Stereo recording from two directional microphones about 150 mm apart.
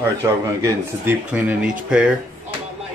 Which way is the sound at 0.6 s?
20° right (ahead or behind).